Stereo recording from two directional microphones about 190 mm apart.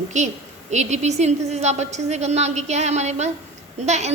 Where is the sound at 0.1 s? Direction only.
40° right (ahead or behind).